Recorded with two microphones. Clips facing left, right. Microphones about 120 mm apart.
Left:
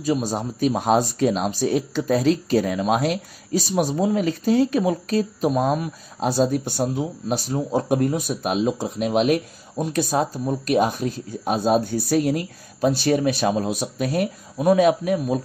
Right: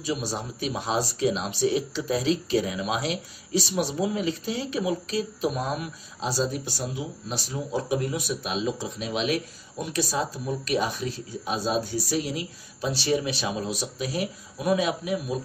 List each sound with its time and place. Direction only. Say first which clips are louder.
0.0 s speech: left 7 dB; 45° left (ahead or behind)